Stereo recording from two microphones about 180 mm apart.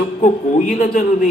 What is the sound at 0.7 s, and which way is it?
Speech, 45° left (ahead or behind).